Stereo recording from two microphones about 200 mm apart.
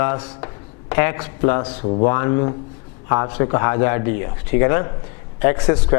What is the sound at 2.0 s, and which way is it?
A man's voice, 20° left (ahead or behind).